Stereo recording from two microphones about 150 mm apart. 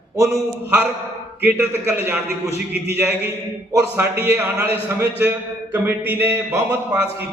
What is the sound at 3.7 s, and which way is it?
Speech, 15° right (ahead or behind).